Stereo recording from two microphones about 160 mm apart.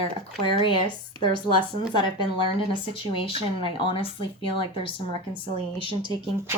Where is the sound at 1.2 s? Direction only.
30° left (ahead or behind).